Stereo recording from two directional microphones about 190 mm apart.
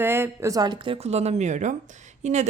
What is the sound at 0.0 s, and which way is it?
Speech, 10° right (ahead or behind).